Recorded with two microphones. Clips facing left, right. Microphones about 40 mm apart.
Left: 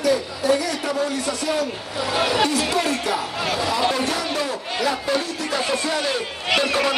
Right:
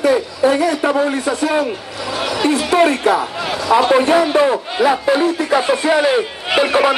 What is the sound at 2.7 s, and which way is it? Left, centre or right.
A man's voice, right.